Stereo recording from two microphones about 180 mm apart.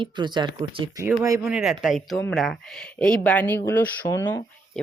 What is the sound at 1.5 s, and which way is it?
Speech, centre (ahead or behind).